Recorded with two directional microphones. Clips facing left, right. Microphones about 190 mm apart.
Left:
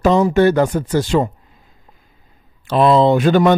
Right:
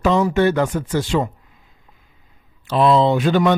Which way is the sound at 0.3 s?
40° left (ahead or behind).